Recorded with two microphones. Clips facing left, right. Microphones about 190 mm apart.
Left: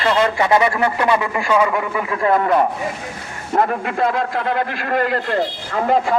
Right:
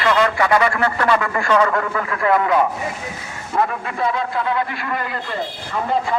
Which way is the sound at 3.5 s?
55° left (ahead or behind).